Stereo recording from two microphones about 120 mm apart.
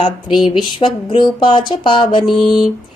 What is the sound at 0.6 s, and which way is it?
Speech, 40° left (ahead or behind).